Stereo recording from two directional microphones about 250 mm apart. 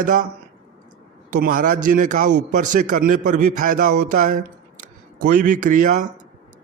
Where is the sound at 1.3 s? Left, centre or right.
Right.